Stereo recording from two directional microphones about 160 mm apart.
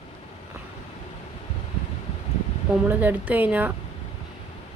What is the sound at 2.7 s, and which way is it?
A woman's voice, 10° right (ahead or behind).